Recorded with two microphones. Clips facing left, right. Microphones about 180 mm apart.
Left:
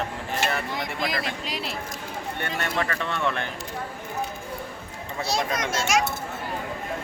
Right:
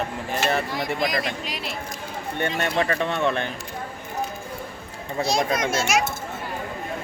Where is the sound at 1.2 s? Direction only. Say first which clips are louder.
Right 1 dB; 30° left (ahead or behind).